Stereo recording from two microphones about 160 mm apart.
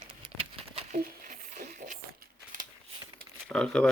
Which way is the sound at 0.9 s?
50° right (ahead or behind).